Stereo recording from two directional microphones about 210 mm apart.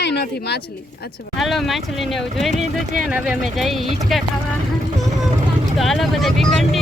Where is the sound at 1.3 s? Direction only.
Centre (ahead or behind).